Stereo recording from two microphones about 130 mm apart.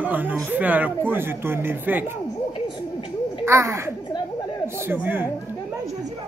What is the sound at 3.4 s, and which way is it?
Speech, 20° right (ahead or behind).